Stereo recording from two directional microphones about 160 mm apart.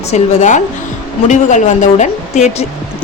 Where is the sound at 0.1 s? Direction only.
50° left (ahead or behind).